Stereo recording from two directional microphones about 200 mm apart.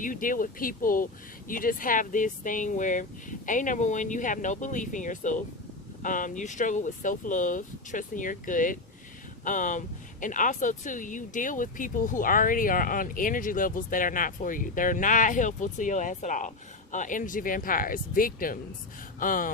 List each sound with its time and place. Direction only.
0.0 s speech: 40° left (ahead or behind)